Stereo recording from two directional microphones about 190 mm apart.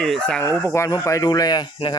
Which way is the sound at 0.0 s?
5° left (ahead or behind).